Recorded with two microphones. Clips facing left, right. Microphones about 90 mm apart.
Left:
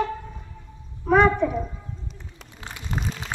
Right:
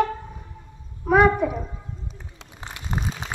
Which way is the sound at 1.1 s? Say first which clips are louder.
Right 1 dB; 10° right (ahead or behind).